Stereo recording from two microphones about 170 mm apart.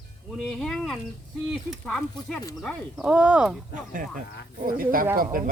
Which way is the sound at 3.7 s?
50° right (ahead or behind).